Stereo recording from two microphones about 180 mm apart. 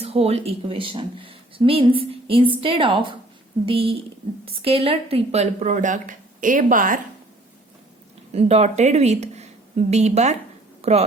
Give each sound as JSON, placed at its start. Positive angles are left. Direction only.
{"t": 0.0, "sound": "speech", "side_deg": -35}
{"t": 8.3, "sound": "speech", "side_deg": -35}